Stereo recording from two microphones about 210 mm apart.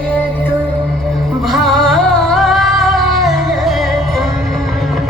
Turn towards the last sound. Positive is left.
turn(degrees=0)  # may be behind; listen again after turning